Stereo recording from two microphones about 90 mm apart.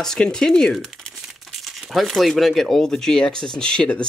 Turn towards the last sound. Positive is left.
turn(degrees=10)  # may be behind; listen again after turning